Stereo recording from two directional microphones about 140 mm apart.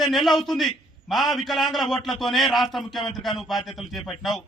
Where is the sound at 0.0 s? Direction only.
Centre (ahead or behind).